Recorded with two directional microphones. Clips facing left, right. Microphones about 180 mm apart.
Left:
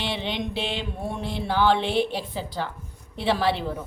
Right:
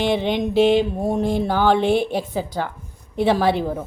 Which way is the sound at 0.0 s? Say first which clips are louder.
Right 9 dB; 45° right (ahead or behind).